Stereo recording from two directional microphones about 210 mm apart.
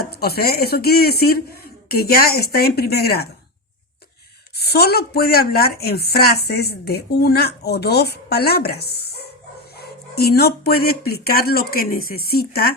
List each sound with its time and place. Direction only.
0.1 s speech: 50° left (ahead or behind)
4.5 s speech: 50° left (ahead or behind)